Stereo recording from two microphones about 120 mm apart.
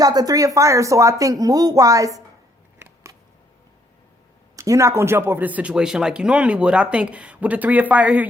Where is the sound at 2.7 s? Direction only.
25° right (ahead or behind).